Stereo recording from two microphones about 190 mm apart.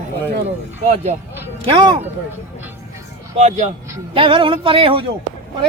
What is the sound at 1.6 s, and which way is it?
Speech, 25° right (ahead or behind).